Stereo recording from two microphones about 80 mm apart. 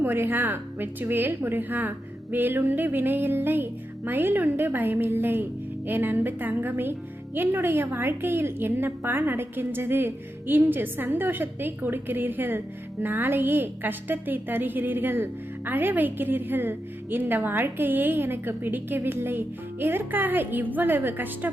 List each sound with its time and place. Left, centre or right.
0.0 s a woman's voice: right